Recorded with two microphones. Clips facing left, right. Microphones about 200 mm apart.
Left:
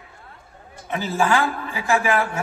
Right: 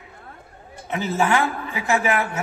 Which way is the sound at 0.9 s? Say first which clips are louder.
Even; 20° right (ahead or behind).